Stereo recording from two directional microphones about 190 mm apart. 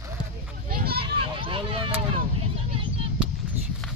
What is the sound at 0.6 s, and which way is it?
Children playing, 50° right (ahead or behind).